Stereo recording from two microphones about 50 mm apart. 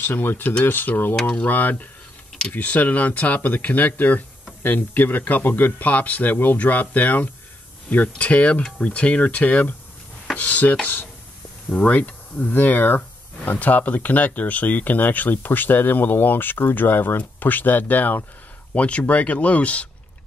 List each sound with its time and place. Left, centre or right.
0.0 s speech: left
18.8 s speech: left